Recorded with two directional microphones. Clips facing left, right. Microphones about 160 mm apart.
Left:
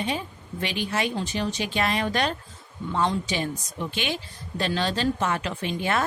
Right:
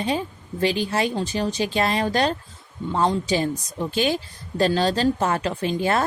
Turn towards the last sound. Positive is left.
turn(degrees=-35)  # may be behind; listen again after turning